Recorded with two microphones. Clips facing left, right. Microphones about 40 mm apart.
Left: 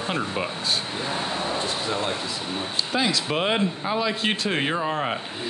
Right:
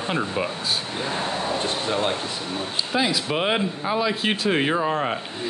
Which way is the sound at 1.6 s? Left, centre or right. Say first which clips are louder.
Right 2 dB; right.